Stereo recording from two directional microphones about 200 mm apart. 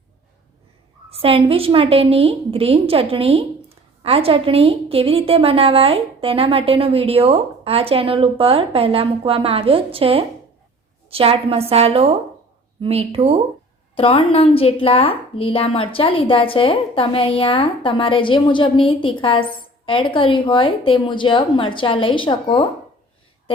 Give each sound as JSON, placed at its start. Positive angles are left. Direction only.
{"t": 1.2, "sound": "a woman's voice", "side_deg": -30}
{"t": 13.9, "sound": "a woman's voice", "side_deg": 30}